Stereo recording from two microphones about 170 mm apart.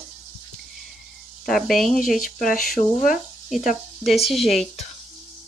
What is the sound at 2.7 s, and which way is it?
Speech, 55° left (ahead or behind).